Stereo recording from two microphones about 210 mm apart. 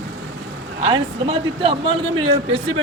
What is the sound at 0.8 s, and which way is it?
Speech, 25° right (ahead or behind).